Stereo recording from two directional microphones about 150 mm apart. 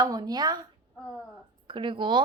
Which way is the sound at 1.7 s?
35° right (ahead or behind).